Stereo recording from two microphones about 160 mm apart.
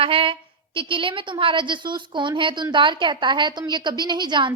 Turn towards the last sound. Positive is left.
turn(degrees=-30)  # may be behind; listen again after turning